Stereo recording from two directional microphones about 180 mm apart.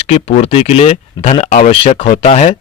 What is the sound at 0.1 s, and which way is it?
A man's voice, 35° left (ahead or behind).